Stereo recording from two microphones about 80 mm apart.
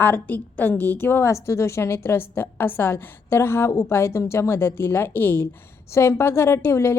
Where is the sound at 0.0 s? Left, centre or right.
Left.